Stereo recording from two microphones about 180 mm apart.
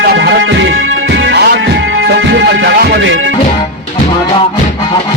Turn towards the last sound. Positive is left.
turn(degrees=-90)